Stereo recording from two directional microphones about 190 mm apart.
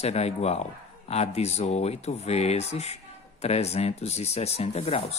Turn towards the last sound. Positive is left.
turn(degrees=30)  # may be behind; listen again after turning